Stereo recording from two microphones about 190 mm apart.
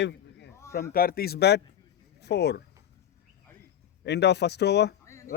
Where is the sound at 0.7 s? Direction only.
50° left (ahead or behind).